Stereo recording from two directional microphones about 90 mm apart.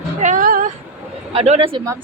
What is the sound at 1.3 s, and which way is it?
Speech, 90° right.